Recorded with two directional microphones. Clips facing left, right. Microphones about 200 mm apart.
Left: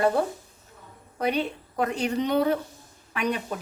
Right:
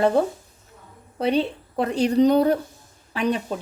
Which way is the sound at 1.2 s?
30° right (ahead or behind).